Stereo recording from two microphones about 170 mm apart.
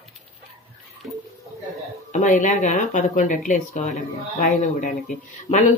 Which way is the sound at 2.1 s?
50° left (ahead or behind).